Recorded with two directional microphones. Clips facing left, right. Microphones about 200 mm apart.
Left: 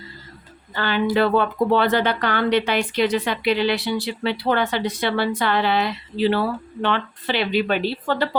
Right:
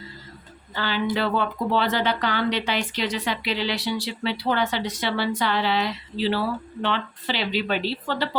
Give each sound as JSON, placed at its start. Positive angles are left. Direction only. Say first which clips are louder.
{"t": 0.8, "sound": "speech", "louder": "left 5 dB", "side_deg": 55}